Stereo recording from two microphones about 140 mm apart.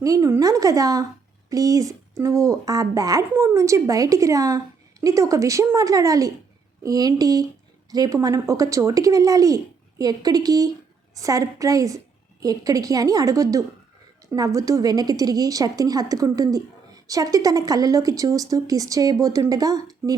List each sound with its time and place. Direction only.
0.0 s a woman's voice: 25° right (ahead or behind)